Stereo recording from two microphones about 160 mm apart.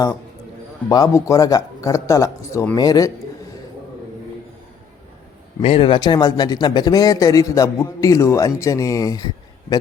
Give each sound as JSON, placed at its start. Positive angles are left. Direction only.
{"t": 0.9, "sound": "speech", "side_deg": 20}
{"t": 5.6, "sound": "speech", "side_deg": 35}